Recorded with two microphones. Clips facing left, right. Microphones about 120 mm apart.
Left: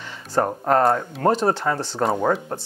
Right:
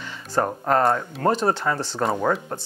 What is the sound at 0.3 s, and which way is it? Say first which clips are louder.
Speech: left 2 dB; 35° left (ahead or behind).